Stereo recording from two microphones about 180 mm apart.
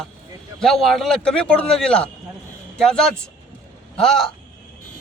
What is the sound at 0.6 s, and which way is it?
A man's voice, centre (ahead or behind).